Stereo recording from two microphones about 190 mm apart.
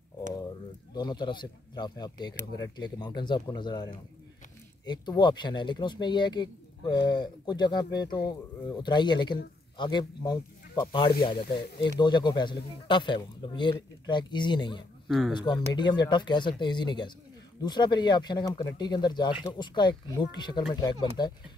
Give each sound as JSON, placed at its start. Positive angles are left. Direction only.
{"t": 0.9, "sound": "speech", "side_deg": 25}
{"t": 15.0, "sound": "speech", "side_deg": 0}
{"t": 15.3, "sound": "speech", "side_deg": 25}